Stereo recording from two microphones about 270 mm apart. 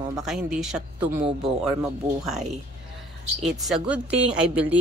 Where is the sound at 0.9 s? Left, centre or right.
Centre.